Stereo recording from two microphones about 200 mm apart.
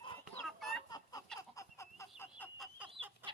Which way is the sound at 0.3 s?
Centre (ahead or behind).